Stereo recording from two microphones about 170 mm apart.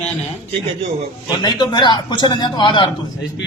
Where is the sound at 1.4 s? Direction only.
25° left (ahead or behind).